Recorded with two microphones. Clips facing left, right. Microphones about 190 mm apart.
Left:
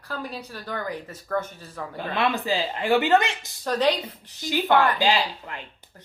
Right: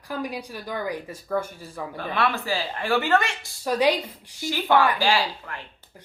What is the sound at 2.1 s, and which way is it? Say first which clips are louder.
Speech: left 1 dB; 20° left (ahead or behind).